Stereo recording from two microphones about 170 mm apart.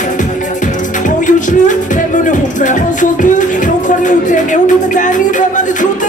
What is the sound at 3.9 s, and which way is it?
Music, 50° left (ahead or behind).